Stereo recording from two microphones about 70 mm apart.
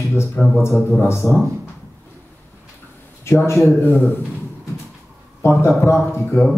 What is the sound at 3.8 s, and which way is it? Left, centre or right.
Speech, left.